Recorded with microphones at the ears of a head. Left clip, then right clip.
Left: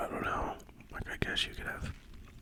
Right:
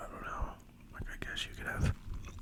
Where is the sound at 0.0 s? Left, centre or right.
Left.